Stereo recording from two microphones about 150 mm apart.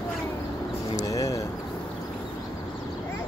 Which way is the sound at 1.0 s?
20° left (ahead or behind).